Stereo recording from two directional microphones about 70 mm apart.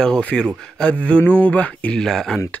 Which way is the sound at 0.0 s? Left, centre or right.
Centre.